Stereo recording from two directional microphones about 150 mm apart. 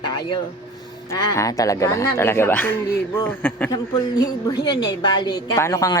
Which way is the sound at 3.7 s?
25° left (ahead or behind).